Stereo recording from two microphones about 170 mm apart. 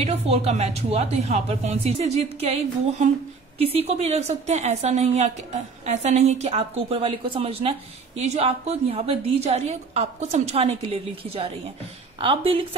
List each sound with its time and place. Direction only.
0.0 s a woman's voice: 40° right (ahead or behind)